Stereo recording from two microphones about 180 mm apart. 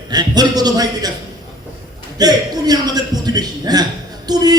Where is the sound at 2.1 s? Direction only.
20° right (ahead or behind).